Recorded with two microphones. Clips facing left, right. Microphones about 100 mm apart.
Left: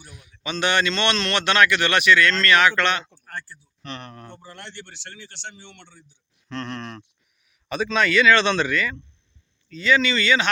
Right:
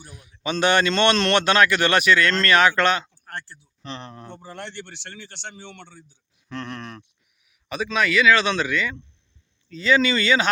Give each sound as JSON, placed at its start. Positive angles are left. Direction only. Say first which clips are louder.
{"t": 0.1, "sound": "speech", "louder": "right 4 dB", "side_deg": -30}
{"t": 3.3, "sound": "speech", "louder": "even", "side_deg": -25}
{"t": 4.4, "sound": "speech", "louder": "right 4 dB", "side_deg": -55}
{"t": 6.5, "sound": "a man's voice", "louder": "left 1 dB", "side_deg": -10}
{"t": 9.6, "sound": "speech", "louder": "right 1 dB", "side_deg": -30}